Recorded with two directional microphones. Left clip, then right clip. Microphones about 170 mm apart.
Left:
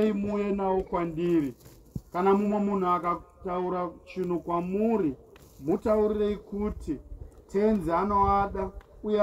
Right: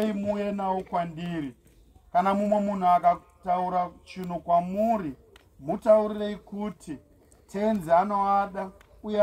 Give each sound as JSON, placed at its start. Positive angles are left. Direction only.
{"t": 0.0, "sound": "a man's voice", "side_deg": -35}
{"t": 5.7, "sound": "speech", "side_deg": -30}